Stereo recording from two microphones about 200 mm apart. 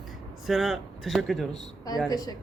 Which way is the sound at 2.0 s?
20° left (ahead or behind).